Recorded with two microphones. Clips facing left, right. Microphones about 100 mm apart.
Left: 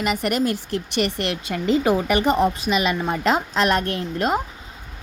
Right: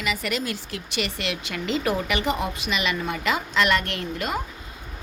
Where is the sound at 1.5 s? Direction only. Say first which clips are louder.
Left 8 dB; 80° right.